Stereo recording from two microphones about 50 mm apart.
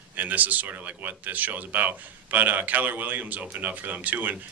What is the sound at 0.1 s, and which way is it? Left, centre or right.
Speech, right.